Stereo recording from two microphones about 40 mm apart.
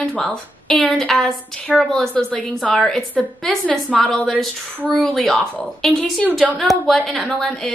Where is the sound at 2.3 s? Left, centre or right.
Left.